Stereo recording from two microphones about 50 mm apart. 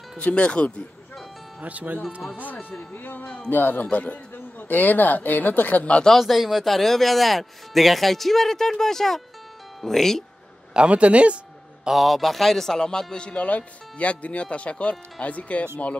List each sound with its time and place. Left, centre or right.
0.2 s speech: left
1.6 s speech: right
2.9 s speech: left
6.1 s speech: centre
10.7 s a man's voice: right
11.8 s speech: centre; by 15.7 s left